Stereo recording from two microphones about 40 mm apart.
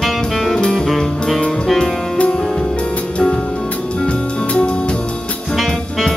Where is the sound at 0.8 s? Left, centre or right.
Centre.